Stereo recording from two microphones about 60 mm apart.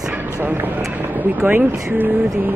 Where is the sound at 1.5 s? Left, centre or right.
Right.